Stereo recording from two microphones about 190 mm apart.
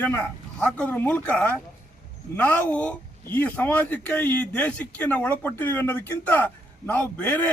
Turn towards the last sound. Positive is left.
turn(degrees=10)  # may be behind; listen again after turning